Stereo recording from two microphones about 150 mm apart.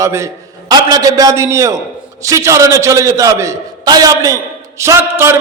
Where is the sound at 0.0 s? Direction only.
20° right (ahead or behind).